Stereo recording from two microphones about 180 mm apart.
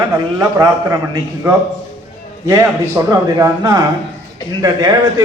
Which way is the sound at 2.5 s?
15° right (ahead or behind).